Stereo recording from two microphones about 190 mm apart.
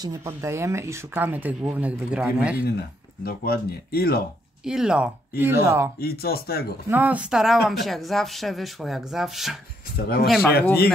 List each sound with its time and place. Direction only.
0.0 s speech: 15° right (ahead or behind)
3.3 s speech: 55° left (ahead or behind)
4.6 s speech: 5° right (ahead or behind)
5.9 s speech: 55° left (ahead or behind)
6.9 s speech: 10° right (ahead or behind)
9.9 s speech: 55° left (ahead or behind)